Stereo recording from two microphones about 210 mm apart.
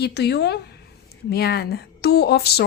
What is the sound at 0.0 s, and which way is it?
A woman's voice, 50° left (ahead or behind).